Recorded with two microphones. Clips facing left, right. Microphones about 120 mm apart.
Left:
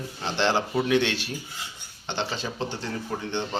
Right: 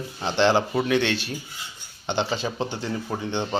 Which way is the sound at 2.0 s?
10° right (ahead or behind).